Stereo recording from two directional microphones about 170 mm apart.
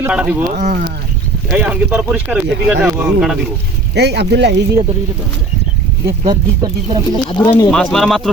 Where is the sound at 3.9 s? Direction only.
80° right.